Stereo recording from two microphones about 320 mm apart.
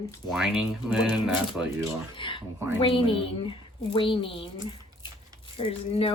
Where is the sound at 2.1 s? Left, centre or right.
Centre.